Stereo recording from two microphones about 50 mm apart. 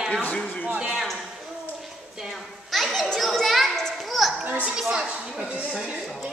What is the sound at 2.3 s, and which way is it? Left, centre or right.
Children playing, centre.